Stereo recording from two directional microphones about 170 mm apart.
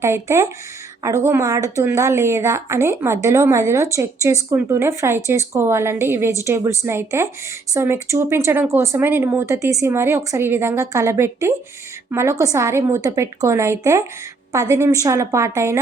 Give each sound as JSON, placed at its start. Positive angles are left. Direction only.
{"t": 0.0, "sound": "a woman's voice", "side_deg": -15}